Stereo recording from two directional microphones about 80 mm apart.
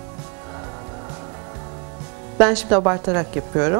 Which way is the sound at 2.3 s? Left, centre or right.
Centre.